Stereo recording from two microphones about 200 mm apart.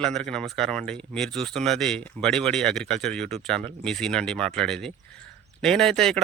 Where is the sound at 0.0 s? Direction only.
5° left (ahead or behind).